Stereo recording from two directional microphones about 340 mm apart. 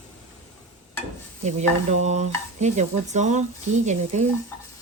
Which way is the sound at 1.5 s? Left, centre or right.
Centre.